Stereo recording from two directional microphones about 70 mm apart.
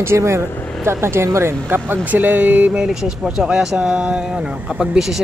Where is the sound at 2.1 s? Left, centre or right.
Right.